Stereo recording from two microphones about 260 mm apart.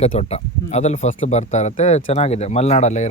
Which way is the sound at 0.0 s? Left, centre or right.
Left.